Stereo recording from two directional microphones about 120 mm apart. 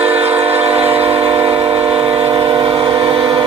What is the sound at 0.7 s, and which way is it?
Train, 55° right (ahead or behind).